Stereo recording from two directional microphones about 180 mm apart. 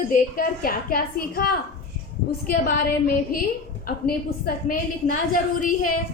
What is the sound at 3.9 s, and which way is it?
A woman's voice, 55° left (ahead or behind).